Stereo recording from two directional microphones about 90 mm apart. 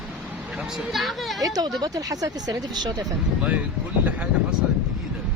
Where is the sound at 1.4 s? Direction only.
45° right (ahead or behind).